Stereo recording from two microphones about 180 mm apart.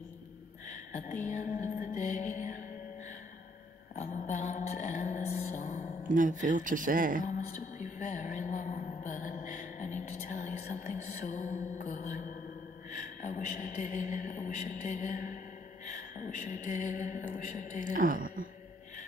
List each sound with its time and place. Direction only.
0.9 s a sound: 45° left (ahead or behind)
3.9 s music: 40° left (ahead or behind)
6.0 s speech: 45° right (ahead or behind)
8.0 s music: 45° left (ahead or behind)
12.9 s speech: 45° left (ahead or behind)
15.8 s a sound: 45° left (ahead or behind)
17.9 s speech: 50° right (ahead or behind)